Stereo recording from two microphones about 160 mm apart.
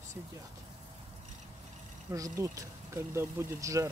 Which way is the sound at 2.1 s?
20° right (ahead or behind).